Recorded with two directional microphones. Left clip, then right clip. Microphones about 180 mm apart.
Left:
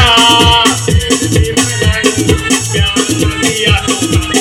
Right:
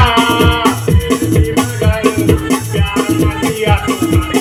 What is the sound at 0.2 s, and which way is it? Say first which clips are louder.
Music: left 5 dB; 50° right (ahead or behind).